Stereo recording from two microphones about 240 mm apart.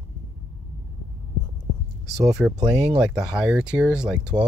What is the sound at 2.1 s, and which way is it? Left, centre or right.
Speech, centre.